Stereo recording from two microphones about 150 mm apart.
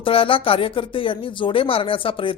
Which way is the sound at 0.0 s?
35° left (ahead or behind).